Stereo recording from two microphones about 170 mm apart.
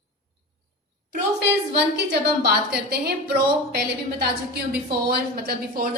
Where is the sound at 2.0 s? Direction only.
70° right (ahead or behind).